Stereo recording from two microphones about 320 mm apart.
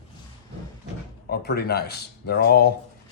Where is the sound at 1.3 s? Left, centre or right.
Left.